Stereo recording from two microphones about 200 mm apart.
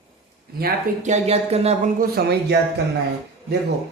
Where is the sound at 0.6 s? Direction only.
35° right (ahead or behind).